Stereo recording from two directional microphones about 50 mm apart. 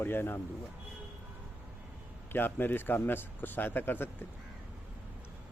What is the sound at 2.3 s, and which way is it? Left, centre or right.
Speech, left.